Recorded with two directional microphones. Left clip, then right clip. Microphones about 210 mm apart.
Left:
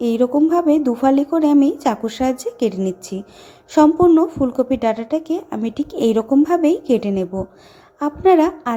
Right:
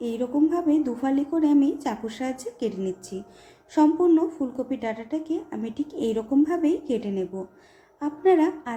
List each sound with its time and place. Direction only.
0.0 s a woman's voice: 30° left (ahead or behind)